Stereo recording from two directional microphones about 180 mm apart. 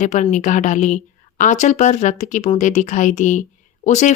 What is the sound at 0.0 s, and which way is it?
A woman's voice, 40° left (ahead or behind).